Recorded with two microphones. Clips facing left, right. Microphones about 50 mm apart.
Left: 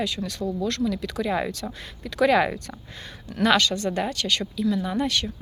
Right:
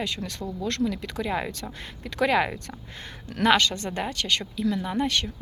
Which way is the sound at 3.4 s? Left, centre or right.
Right.